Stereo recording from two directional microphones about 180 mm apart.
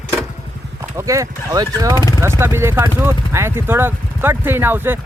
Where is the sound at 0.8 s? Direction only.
15° right (ahead or behind).